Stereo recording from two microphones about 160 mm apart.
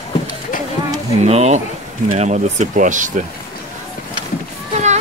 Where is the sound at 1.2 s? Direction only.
40° right (ahead or behind).